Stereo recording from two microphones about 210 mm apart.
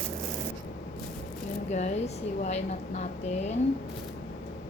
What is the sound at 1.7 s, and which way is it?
A woman's voice, 30° left (ahead or behind).